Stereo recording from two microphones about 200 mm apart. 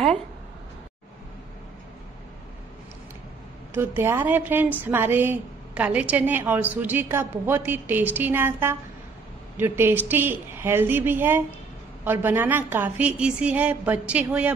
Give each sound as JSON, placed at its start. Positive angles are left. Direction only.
{"t": 3.7, "sound": "a woman's voice", "side_deg": -10}